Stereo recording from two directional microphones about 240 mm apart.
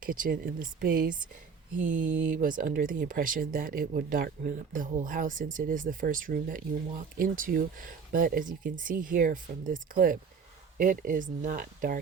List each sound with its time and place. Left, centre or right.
0.0 s speech: right